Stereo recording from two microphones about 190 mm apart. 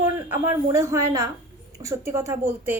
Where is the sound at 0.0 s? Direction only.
15° right (ahead or behind).